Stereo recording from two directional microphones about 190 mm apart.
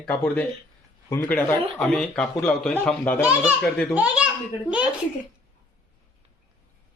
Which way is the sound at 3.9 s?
5° right (ahead or behind).